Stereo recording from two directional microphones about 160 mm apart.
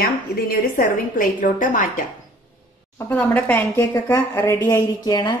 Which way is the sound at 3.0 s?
10° left (ahead or behind).